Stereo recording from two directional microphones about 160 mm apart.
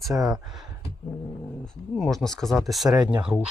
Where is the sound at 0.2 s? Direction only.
5° right (ahead or behind).